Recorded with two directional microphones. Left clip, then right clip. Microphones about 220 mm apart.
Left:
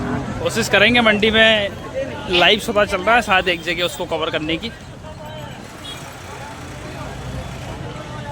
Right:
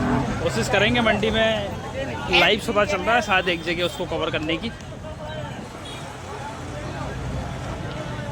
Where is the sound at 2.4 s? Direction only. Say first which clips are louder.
Left 4 dB; 15° left (ahead or behind).